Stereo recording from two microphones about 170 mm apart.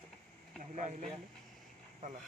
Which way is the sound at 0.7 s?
45° right (ahead or behind).